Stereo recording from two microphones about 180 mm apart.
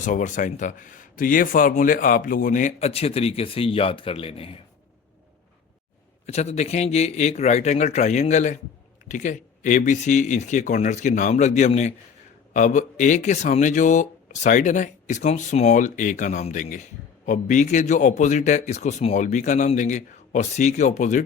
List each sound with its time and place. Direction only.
0.0 s a man's voice: 45° left (ahead or behind)
6.2 s a man's voice: 35° left (ahead or behind)